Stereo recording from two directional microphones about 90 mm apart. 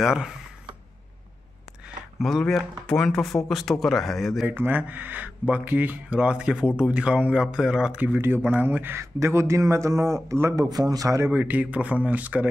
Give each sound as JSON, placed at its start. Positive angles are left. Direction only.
{"t": 0.0, "sound": "speech", "side_deg": -5}
{"t": 2.2, "sound": "speech", "side_deg": 5}
{"t": 4.5, "sound": "speech", "side_deg": -20}
{"t": 8.0, "sound": "speech", "side_deg": -20}
{"t": 11.2, "sound": "speech", "side_deg": -20}